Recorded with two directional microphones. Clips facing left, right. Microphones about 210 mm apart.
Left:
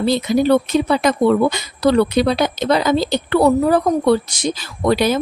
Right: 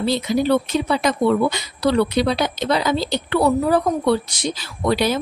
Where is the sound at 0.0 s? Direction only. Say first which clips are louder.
Left 3 dB; 50° left (ahead or behind).